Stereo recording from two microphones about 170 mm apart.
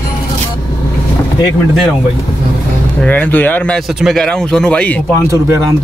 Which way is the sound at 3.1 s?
10° left (ahead or behind).